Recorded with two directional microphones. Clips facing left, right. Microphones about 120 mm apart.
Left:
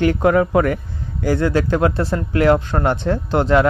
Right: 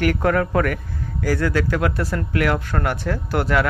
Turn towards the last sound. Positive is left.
turn(degrees=25)  # may be behind; listen again after turning